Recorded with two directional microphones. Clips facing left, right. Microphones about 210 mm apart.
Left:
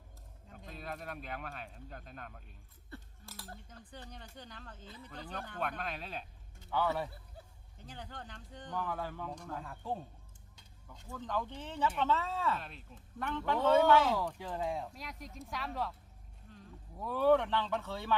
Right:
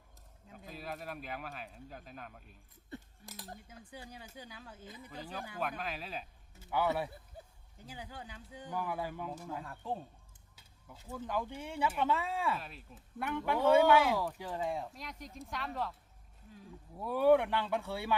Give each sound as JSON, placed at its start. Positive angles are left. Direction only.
{"t": 0.4, "sound": "speech", "side_deg": -5}
{"t": 2.9, "sound": "chink", "side_deg": -20}
{"t": 3.7, "sound": "speech", "side_deg": -10}
{"t": 6.7, "sound": "speech", "side_deg": -15}
{"t": 10.5, "sound": "a sound", "side_deg": -5}
{"t": 11.1, "sound": "speech", "side_deg": -10}